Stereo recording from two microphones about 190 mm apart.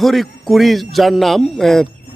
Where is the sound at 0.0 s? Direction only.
Centre (ahead or behind).